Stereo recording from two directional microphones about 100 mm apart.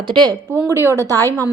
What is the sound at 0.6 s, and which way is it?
Speech, 25° right (ahead or behind).